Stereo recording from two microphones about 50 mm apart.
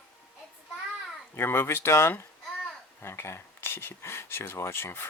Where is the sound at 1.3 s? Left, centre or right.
Left.